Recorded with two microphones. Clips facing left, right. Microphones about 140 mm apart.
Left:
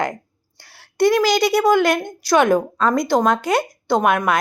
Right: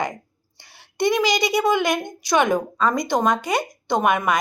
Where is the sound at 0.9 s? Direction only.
5° left (ahead or behind).